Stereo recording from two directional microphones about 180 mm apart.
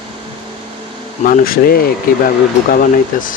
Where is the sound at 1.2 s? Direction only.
50° left (ahead or behind).